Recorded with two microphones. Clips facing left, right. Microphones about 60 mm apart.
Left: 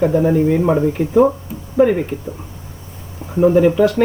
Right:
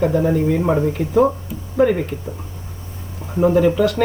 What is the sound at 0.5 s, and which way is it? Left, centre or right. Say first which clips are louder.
Speech: left 3 dB; centre.